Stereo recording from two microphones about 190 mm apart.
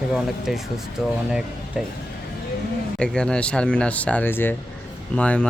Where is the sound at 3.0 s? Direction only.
5° left (ahead or behind).